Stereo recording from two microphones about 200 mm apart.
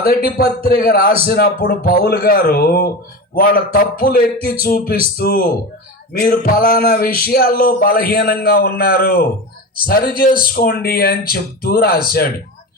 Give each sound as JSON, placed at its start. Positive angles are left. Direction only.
{"t": 0.0, "sound": "speech", "side_deg": 45}